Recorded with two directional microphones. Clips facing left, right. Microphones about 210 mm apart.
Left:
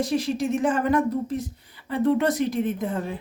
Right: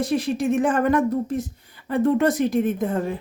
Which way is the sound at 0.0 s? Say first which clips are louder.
Right 2 dB; 55° right (ahead or behind).